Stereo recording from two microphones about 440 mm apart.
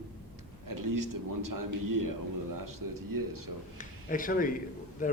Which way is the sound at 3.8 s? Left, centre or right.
Centre.